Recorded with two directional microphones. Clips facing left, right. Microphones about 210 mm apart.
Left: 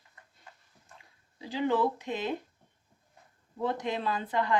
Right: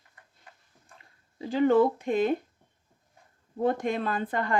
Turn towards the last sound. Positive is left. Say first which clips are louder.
# right 1 dB
turn(degrees=-50)  # may be behind; listen again after turning